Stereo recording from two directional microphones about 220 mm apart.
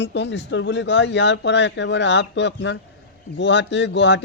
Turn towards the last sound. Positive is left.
turn(degrees=55)  # may be behind; listen again after turning